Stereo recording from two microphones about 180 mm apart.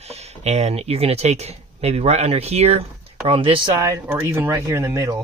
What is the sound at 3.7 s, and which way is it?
Speech, 20° right (ahead or behind).